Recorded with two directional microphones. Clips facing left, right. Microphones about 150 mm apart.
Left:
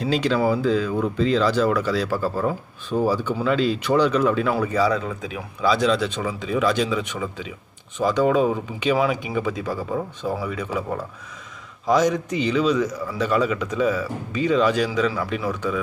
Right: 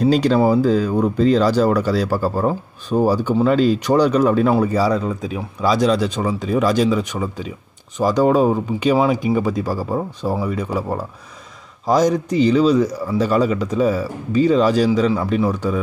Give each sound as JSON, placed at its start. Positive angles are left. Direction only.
{"t": 0.0, "sound": "speech", "side_deg": -40}